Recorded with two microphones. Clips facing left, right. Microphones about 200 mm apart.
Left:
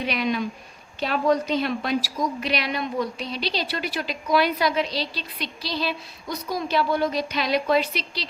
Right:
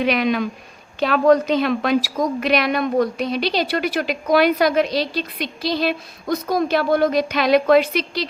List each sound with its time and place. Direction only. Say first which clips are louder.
0.0 s speech: right 6 dB; 85° right
2.1 s a woman's voice: right 7 dB; 50° right (ahead or behind)